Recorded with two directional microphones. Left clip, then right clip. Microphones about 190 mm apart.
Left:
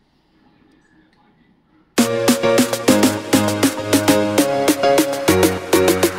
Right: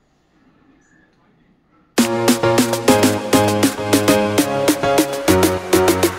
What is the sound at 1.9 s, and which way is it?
Music, centre (ahead or behind).